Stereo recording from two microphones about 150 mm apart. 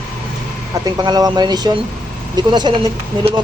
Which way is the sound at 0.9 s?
25° right (ahead or behind).